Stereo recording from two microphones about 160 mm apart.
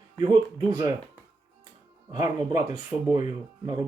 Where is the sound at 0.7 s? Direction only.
25° right (ahead or behind).